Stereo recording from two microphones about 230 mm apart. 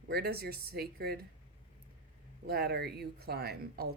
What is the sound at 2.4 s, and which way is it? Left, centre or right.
Speech, right.